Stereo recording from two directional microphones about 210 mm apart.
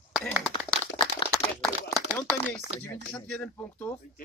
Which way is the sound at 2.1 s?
10° left (ahead or behind).